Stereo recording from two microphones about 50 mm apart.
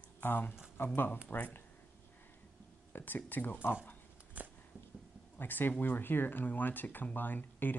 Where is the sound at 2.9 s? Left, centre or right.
Left.